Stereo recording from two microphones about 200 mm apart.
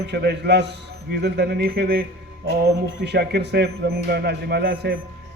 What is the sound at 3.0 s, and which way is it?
Speech, 55° right (ahead or behind).